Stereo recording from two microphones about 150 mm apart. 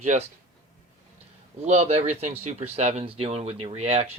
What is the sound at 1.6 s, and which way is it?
Speech, 50° right (ahead or behind).